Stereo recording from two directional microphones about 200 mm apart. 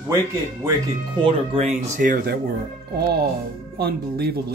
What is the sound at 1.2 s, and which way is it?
Speech, 30° right (ahead or behind).